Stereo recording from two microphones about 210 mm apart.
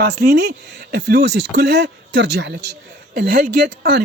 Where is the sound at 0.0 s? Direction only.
50° right (ahead or behind).